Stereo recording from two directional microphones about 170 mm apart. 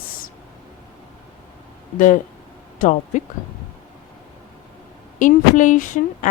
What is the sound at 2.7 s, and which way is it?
Speech, 45° left (ahead or behind).